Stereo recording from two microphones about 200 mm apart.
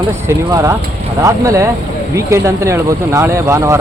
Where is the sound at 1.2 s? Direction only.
15° right (ahead or behind).